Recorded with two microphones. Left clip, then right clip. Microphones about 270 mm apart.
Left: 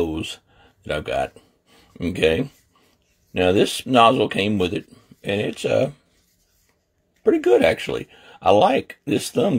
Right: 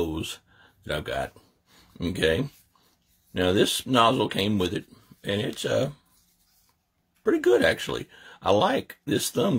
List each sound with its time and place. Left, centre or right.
0.0 s a sound: centre
0.8 s speech: centre
7.2 s speech: centre